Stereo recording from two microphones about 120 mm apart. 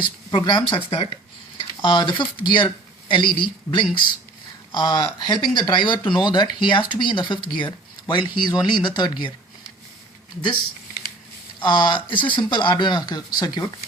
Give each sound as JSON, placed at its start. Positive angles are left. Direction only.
{"t": 0.0, "sound": "speech", "side_deg": 40}
{"t": 11.6, "sound": "speech", "side_deg": 35}